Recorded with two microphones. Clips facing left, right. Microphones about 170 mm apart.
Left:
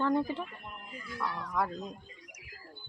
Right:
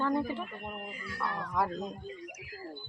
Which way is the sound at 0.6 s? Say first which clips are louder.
Right 7 dB; 55° right (ahead or behind).